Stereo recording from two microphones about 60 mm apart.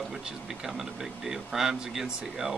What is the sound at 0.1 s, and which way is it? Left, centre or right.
Speech, centre.